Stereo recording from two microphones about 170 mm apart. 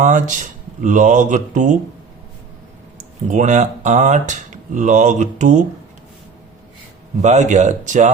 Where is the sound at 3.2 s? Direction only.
45° right (ahead or behind).